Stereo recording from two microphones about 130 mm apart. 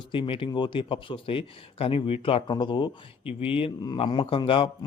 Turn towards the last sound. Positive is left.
turn(degrees=40)  # may be behind; listen again after turning